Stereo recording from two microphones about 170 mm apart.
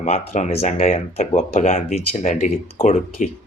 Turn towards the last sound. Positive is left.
turn(degrees=50)  # may be behind; listen again after turning